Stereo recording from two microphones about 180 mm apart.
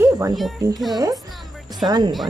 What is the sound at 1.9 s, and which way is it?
Speech, 25° right (ahead or behind).